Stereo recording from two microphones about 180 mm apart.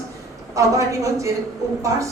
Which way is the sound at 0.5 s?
15° right (ahead or behind).